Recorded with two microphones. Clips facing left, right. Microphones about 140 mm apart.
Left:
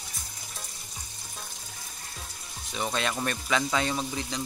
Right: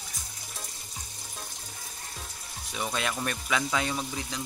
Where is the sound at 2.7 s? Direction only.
5° right (ahead or behind).